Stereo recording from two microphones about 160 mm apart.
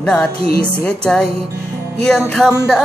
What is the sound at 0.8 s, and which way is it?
Music, 5° left (ahead or behind).